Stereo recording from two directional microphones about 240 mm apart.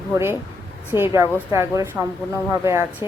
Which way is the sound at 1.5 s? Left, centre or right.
Centre.